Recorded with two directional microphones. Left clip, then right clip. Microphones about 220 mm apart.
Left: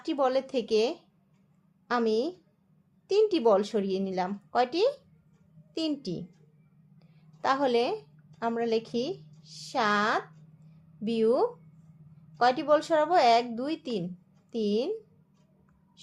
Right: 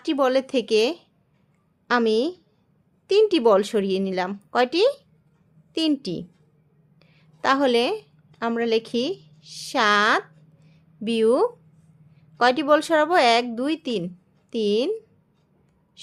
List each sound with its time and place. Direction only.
0.0 s a woman's voice: 30° right (ahead or behind)